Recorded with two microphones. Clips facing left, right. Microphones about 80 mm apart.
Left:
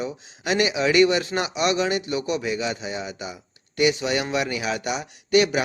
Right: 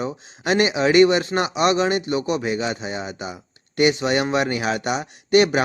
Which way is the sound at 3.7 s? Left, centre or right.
Right.